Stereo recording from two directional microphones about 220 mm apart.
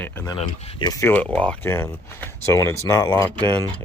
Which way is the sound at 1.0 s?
5° left (ahead or behind).